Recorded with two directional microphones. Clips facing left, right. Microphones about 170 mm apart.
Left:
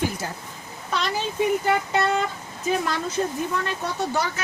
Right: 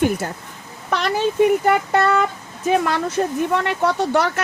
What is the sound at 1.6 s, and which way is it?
Speech, 60° right (ahead or behind).